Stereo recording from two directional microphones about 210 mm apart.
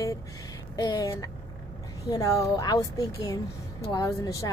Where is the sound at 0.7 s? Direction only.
20° left (ahead or behind).